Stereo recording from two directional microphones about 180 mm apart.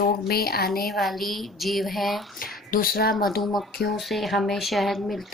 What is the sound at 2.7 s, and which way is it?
Speech, 55° left (ahead or behind).